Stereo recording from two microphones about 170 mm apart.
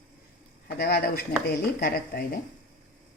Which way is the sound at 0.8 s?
65° left (ahead or behind).